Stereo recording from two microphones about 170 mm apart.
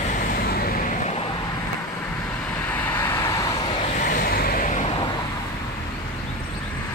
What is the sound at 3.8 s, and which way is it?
Vehicle, 55° left (ahead or behind).